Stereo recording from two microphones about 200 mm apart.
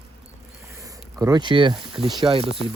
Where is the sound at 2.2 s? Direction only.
25° right (ahead or behind).